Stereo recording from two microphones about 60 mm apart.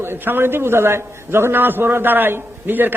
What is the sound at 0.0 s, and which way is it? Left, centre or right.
A man's voice, right.